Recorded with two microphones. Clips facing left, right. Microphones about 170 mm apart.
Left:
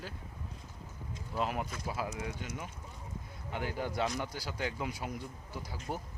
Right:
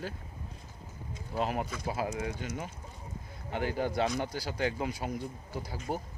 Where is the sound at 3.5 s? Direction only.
50° right (ahead or behind).